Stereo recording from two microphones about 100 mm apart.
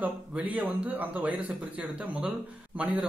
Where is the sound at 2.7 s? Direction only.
15° right (ahead or behind).